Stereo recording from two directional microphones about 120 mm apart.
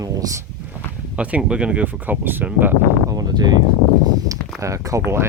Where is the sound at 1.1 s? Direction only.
10° right (ahead or behind).